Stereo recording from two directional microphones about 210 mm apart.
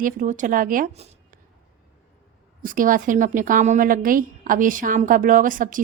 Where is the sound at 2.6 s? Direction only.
40° right (ahead or behind).